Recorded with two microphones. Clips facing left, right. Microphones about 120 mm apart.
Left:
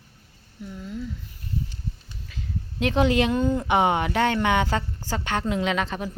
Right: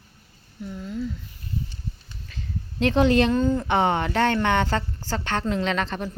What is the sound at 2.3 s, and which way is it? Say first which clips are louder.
Speech: left 1 dB; 5° left (ahead or behind).